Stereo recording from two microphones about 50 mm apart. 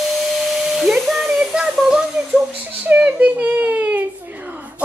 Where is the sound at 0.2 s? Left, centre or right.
Centre.